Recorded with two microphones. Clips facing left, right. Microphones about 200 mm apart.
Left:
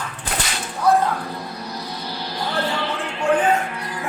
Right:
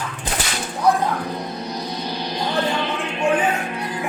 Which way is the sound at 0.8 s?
15° right (ahead or behind).